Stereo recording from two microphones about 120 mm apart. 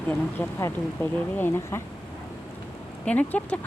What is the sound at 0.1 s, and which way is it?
Speech, 20° left (ahead or behind).